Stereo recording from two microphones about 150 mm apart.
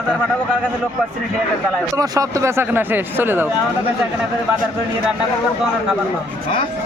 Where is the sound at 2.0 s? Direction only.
25° right (ahead or behind).